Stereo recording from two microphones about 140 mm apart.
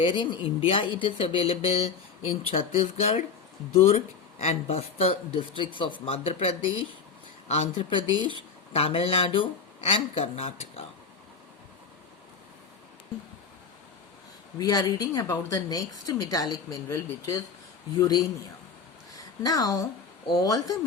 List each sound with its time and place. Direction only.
0.0 s speech: 35° left (ahead or behind)
14.6 s a woman's voice: 25° left (ahead or behind)
19.4 s speech: 25° left (ahead or behind)